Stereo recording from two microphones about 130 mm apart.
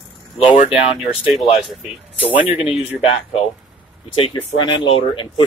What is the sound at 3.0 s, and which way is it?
Speech, 50° left (ahead or behind).